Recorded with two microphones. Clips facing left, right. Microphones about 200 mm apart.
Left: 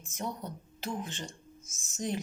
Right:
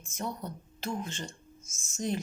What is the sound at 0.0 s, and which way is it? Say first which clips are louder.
A woman's voice: right 1 dB; 15° left (ahead or behind).